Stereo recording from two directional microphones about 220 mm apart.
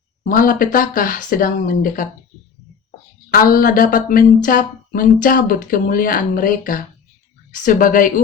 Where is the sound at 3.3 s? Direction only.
40° left (ahead or behind).